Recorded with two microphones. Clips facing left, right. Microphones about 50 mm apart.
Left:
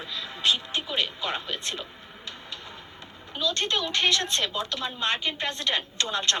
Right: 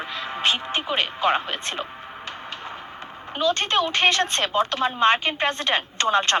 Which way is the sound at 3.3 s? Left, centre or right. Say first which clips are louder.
Right 6 dB; right.